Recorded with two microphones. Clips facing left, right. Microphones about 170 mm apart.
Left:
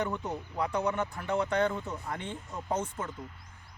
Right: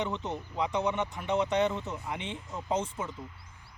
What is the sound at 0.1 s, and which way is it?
Speech, 10° left (ahead or behind).